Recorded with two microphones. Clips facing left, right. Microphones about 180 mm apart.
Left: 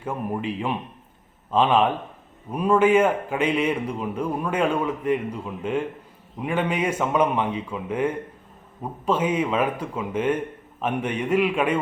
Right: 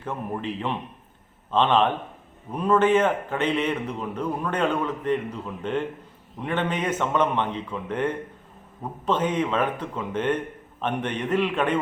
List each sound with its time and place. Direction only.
0.0 s a man's voice: 10° left (ahead or behind)